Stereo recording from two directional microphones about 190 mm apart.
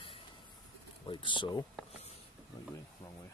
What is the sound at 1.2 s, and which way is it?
Speech, 25° left (ahead or behind).